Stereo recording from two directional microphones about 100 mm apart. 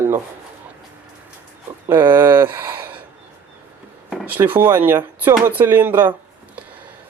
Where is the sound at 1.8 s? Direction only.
50° right (ahead or behind).